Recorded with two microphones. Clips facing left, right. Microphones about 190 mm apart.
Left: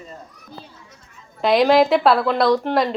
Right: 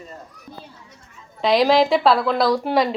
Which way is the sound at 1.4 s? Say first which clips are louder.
Left 1 dB; centre (ahead or behind).